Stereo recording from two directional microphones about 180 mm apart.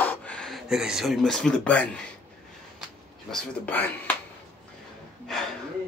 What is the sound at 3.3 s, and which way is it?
Speech, 5° left (ahead or behind).